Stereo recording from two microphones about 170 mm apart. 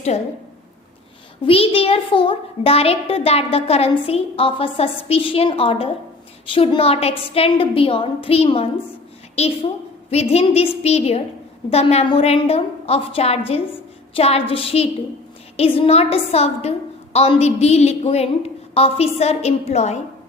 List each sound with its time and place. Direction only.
0.1 s a child's voice: 40° left (ahead or behind)
1.5 s a child's voice: 35° left (ahead or behind)
10.1 s a child's voice: 35° left (ahead or behind)